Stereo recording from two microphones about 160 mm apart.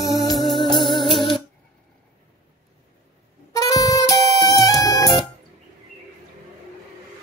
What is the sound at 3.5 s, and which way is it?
Music, 20° left (ahead or behind).